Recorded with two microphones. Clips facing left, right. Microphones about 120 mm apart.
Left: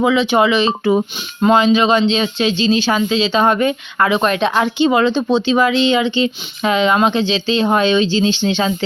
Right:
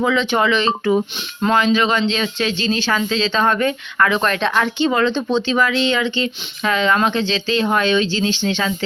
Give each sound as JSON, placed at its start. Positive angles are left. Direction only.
{"t": 0.0, "sound": "speech", "side_deg": 15}